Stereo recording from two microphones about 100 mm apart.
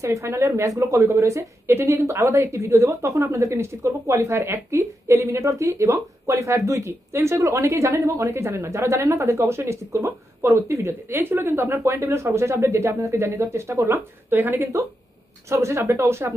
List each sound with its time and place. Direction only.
0.0 s a woman's voice: 30° right (ahead or behind)